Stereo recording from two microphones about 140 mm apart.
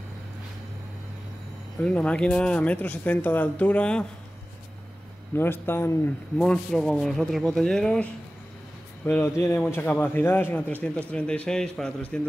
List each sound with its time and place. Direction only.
1.8 s speech: 10° left (ahead or behind)
5.3 s speech: 15° left (ahead or behind)
6.4 s speech: 5° left (ahead or behind)
9.0 s speech: 20° left (ahead or behind)